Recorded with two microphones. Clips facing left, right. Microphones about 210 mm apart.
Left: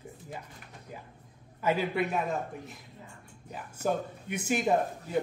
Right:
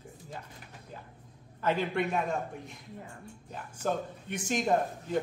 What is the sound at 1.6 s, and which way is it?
A man's voice, 5° left (ahead or behind).